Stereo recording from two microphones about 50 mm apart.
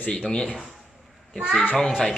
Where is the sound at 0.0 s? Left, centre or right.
Centre.